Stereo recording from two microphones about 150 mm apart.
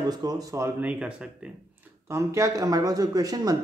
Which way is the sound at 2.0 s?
20° right (ahead or behind).